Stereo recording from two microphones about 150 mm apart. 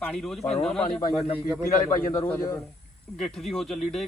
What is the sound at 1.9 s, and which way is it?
Speech, 65° left (ahead or behind).